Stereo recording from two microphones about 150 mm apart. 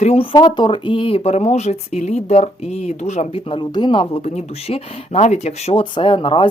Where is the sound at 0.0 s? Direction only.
40° left (ahead or behind).